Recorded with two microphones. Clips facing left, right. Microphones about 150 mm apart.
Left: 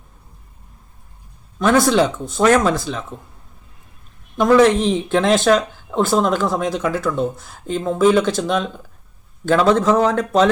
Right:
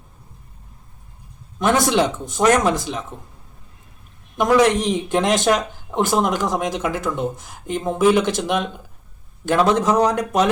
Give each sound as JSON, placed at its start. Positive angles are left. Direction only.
{"t": 1.5, "sound": "speech", "side_deg": -20}
{"t": 4.4, "sound": "speech", "side_deg": -20}